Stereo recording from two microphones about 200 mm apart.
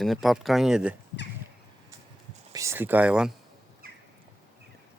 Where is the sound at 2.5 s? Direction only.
15° right (ahead or behind).